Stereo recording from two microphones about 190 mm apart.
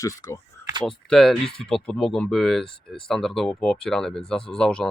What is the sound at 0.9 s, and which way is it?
Speech, centre (ahead or behind).